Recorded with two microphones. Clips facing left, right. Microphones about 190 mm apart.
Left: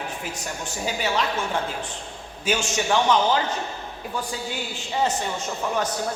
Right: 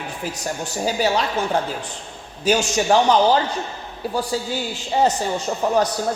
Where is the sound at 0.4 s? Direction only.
40° right (ahead or behind).